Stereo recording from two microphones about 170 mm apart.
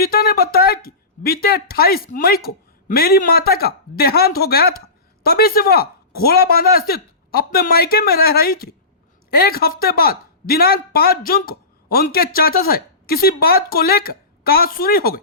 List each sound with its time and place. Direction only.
0.0 s speech: 65° left (ahead or behind)